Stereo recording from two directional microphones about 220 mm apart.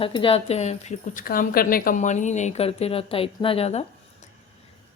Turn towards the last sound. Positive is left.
turn(degrees=30)  # may be behind; listen again after turning